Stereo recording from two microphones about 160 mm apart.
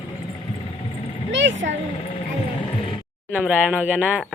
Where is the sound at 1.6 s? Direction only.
90° right.